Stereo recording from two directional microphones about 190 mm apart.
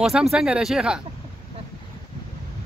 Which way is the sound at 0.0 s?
Centre (ahead or behind).